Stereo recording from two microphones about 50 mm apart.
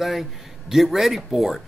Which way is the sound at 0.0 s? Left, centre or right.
Centre.